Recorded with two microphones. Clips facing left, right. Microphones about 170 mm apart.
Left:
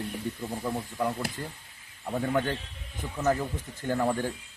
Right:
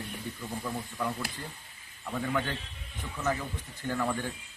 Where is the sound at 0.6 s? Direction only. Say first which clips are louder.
Left 5 dB; 25° left (ahead or behind); by 2.6 s 40° left (ahead or behind).